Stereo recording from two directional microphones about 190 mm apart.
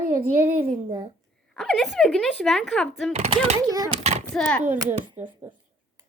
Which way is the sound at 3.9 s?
35° right (ahead or behind).